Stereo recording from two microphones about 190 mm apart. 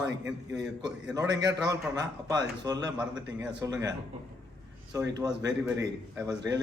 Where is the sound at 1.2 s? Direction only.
20° right (ahead or behind).